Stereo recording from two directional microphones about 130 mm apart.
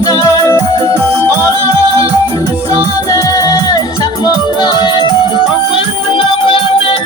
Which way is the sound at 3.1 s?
25° left (ahead or behind).